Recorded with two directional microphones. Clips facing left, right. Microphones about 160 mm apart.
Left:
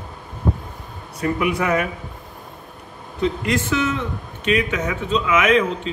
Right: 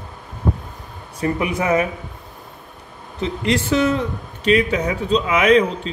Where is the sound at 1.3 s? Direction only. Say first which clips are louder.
Right 1 dB; 25° right (ahead or behind).